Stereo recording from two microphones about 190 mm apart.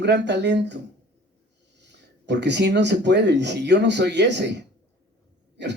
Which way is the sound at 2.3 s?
65° right (ahead or behind).